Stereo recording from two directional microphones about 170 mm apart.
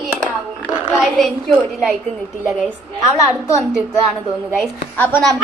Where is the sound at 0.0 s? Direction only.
Centre (ahead or behind).